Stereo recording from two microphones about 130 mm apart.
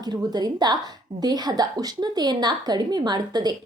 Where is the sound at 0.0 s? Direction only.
30° right (ahead or behind).